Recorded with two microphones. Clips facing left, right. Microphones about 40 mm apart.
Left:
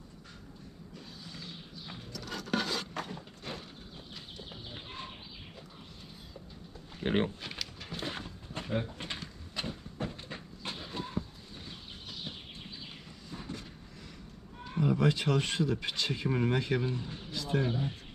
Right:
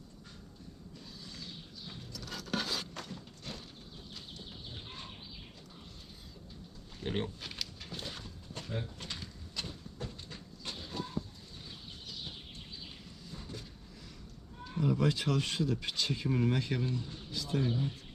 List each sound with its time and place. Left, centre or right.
1.2 s a sound: centre
3.0 s a sound: left
4.4 s livestock: left
6.9 s speech: left
8.0 s a sound: left
9.6 s goat: left
11.5 s horse: left
13.3 s vehicle: centre
14.6 s speech: centre